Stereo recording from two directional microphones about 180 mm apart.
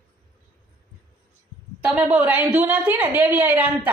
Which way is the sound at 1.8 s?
5° right (ahead or behind).